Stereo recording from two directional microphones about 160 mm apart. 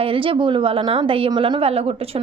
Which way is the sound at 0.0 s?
35° right (ahead or behind).